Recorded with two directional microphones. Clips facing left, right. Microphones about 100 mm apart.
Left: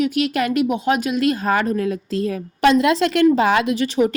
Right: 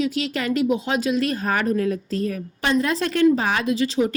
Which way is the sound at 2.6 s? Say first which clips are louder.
Left 7 dB; 80° left.